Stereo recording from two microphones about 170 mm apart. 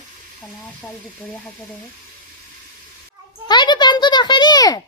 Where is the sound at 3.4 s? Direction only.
25° left (ahead or behind).